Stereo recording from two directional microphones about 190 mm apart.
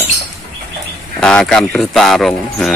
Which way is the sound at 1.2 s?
5° left (ahead or behind).